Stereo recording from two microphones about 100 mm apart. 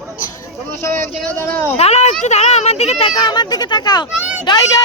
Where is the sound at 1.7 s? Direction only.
90° left.